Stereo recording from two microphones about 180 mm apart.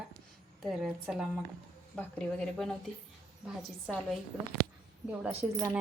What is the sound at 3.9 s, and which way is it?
Speech, centre (ahead or behind).